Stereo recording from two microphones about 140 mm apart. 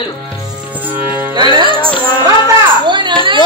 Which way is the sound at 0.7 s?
10° right (ahead or behind).